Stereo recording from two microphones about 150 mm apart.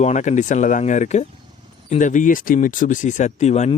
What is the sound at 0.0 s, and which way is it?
Speech, 50° left (ahead or behind).